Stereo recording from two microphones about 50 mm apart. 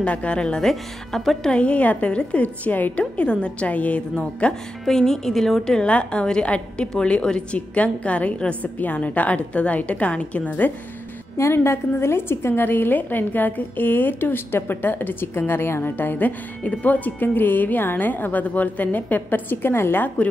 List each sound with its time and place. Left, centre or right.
0.0 s a woman's voice: left
0.7 s a woman's voice: centre
1.5 s a woman's voice: left
2.4 s a woman's voice: left
4.8 s a woman's voice: centre
5.9 s a woman's voice: left
11.3 s a woman's voice: left
12.6 s a woman's voice: left